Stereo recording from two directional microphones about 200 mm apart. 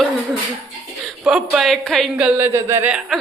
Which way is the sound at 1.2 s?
5° right (ahead or behind).